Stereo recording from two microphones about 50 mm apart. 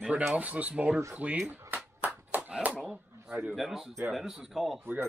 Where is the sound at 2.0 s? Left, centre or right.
Right.